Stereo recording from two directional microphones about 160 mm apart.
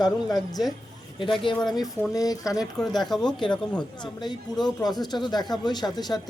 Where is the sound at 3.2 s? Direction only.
30° left (ahead or behind).